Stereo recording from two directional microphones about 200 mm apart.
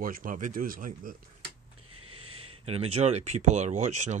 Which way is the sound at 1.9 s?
90° right.